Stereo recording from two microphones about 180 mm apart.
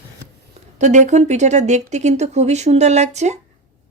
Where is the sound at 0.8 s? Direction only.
40° right (ahead or behind).